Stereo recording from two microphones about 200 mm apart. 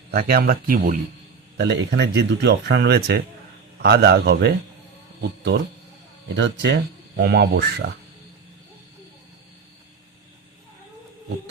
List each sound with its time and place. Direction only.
0.1 s speech: 50° right (ahead or behind)
1.5 s speech: 60° right (ahead or behind)
6.3 s speech: 60° right (ahead or behind)